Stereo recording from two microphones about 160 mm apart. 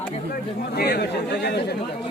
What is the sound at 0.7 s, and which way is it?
Speech, 90° left.